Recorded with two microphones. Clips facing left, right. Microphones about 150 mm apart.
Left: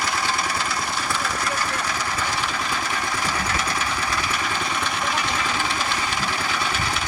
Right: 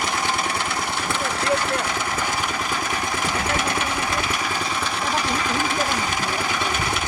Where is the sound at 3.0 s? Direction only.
15° right (ahead or behind).